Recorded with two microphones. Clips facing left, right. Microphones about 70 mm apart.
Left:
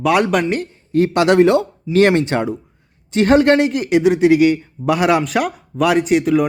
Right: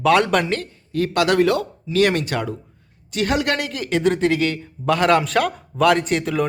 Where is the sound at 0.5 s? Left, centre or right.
Left; by 6.5 s centre.